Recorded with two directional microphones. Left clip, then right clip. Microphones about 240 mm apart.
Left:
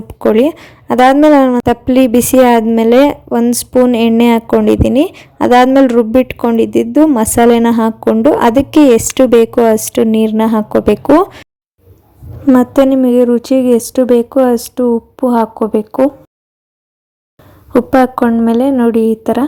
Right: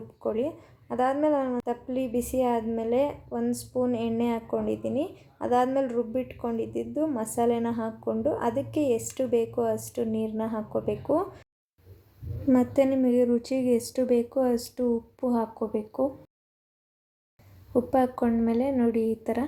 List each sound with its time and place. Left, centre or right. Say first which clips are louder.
0.2 s a woman's voice: left 19 dB; left
12.5 s a woman's voice: left 14 dB; left
17.9 s a woman's voice: left 15 dB; left